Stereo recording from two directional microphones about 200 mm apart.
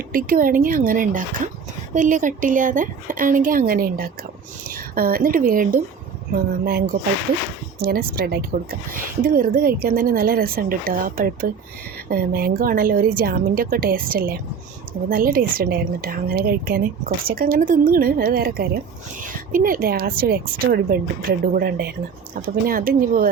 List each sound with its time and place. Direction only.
0.1 s a woman's voice: 45° right (ahead or behind)